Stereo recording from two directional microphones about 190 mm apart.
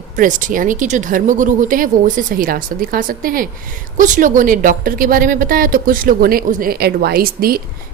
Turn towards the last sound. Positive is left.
turn(degrees=-50)  # may be behind; listen again after turning